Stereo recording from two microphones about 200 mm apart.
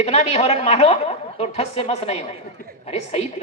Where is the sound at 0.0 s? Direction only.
30° left (ahead or behind).